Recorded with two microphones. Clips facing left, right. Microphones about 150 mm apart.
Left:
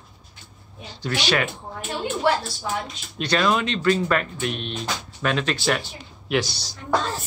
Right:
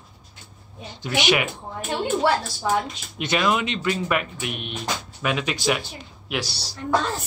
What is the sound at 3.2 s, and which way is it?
Speech, 15° right (ahead or behind).